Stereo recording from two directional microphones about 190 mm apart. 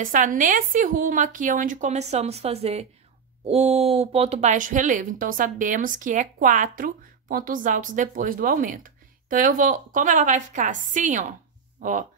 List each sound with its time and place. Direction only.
0.0 s speech: 45° right (ahead or behind)